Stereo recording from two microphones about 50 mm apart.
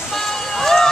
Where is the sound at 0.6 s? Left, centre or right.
Centre.